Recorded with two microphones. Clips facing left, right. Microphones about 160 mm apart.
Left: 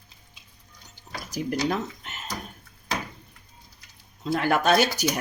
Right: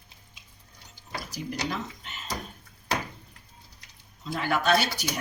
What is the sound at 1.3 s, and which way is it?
Speech, 50° left (ahead or behind).